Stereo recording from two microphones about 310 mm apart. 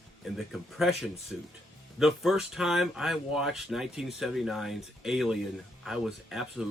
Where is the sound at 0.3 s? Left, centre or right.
Centre.